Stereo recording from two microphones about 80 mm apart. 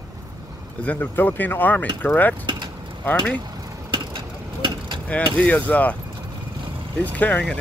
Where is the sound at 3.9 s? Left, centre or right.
Right.